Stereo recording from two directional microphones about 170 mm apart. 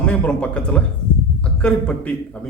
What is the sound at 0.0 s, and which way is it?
A man's voice, 5° left (ahead or behind).